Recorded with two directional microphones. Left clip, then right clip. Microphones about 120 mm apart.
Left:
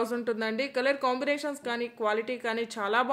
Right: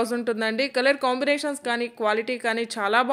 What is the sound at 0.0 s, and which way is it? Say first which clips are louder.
A woman's voice: right 5 dB; 25° right (ahead or behind).